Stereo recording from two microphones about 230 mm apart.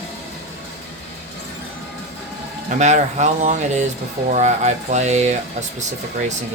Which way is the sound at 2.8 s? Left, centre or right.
Right.